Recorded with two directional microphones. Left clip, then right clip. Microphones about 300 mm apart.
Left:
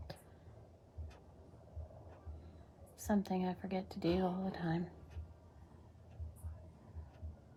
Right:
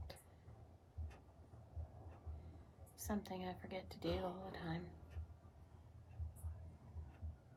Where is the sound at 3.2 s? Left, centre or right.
Left.